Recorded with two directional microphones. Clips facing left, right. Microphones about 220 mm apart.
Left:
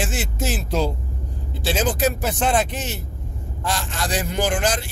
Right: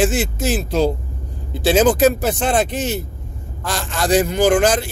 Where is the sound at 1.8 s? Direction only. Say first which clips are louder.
Right 6 dB; 45° right (ahead or behind).